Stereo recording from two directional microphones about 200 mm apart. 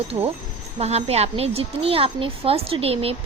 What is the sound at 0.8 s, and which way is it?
Speech, 30° right (ahead or behind).